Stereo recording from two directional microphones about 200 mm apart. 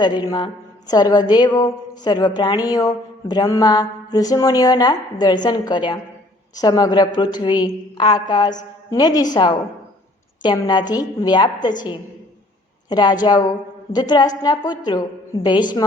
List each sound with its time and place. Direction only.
0.0 s speech: 20° left (ahead or behind)
12.9 s speech: 20° left (ahead or behind)